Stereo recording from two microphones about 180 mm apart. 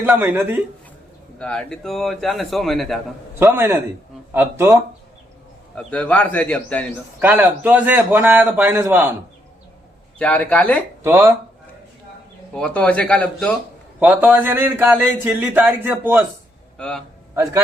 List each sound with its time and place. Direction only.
0.0 s a man's voice: 10° right (ahead or behind)
1.4 s a man's voice: 5° left (ahead or behind)
3.3 s a man's voice: 10° right (ahead or behind)
5.7 s a man's voice: 5° left (ahead or behind)
7.2 s a man's voice: 10° right (ahead or behind)
10.2 s a man's voice: 5° left (ahead or behind)
11.0 s a man's voice: 15° right (ahead or behind)
12.5 s a man's voice: 5° left (ahead or behind); by 16.2 s 10° right (ahead or behind)
16.7 s a man's voice: 5° left (ahead or behind)
17.3 s a man's voice: 15° right (ahead or behind)